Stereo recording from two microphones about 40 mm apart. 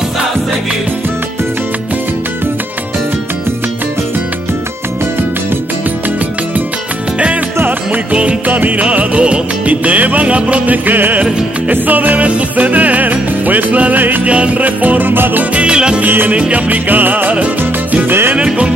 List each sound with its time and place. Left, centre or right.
8.1 s music: right
8.5 s music: right
8.9 s music: right
10.9 s music: right
12.3 s music: right
14.6 s music: right
15.5 s music: right
16.0 s music: right
18.0 s salsa music: right
18.3 s music: right